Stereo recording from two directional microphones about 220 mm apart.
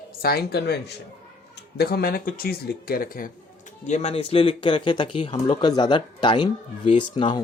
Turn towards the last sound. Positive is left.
turn(degrees=20)  # may be behind; listen again after turning